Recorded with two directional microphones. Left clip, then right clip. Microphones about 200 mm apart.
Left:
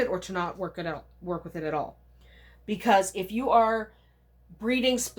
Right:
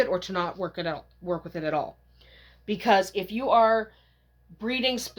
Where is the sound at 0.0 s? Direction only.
45° right (ahead or behind).